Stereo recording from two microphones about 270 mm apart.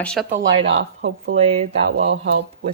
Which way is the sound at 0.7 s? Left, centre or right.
Right.